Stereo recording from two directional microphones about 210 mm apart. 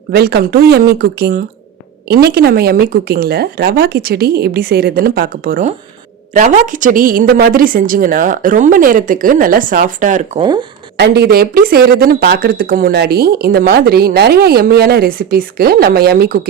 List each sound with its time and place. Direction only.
0.1 s a woman's voice: 50° right (ahead or behind)
10.4 s speech: 20° right (ahead or behind)
10.9 s speech: 50° right (ahead or behind)